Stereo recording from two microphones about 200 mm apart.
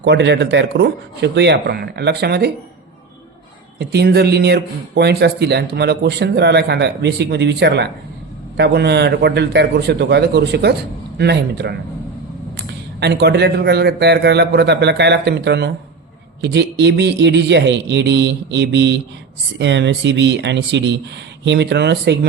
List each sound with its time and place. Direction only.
0.0 s speech: 60° right (ahead or behind)
3.8 s speech: 55° right (ahead or behind)